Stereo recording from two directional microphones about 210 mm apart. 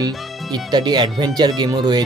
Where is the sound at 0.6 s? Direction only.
20° right (ahead or behind).